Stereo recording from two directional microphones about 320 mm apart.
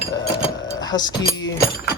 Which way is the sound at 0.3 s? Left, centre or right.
Centre.